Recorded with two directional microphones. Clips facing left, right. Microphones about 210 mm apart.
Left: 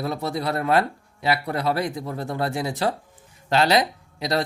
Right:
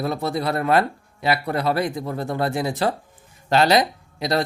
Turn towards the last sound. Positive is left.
turn(degrees=-50)  # may be behind; listen again after turning